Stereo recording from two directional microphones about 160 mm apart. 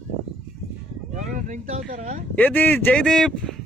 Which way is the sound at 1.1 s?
50° right (ahead or behind).